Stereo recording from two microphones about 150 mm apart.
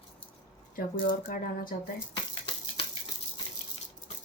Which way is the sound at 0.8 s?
65° left (ahead or behind).